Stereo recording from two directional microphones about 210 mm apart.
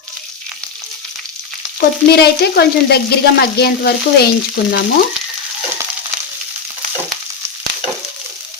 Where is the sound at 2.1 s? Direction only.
50° left (ahead or behind).